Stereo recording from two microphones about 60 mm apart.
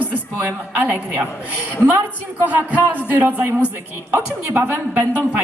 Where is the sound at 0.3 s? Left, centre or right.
Right.